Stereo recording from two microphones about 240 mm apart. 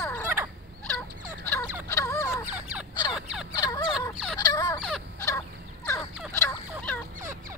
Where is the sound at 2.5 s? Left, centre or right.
Centre.